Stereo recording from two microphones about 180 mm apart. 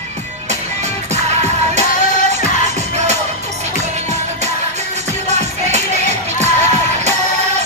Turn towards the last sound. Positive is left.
turn(degrees=-40)  # may be behind; listen again after turning